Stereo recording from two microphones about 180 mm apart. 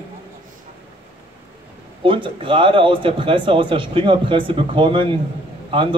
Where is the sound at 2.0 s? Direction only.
30° right (ahead or behind).